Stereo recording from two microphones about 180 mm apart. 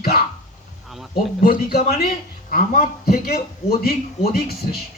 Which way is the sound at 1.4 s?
55° left (ahead or behind).